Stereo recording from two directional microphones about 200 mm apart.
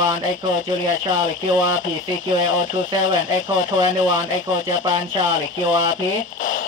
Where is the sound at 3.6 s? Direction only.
75° left (ahead or behind).